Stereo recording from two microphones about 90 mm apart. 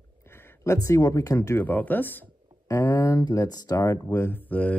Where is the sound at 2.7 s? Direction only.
40° left (ahead or behind).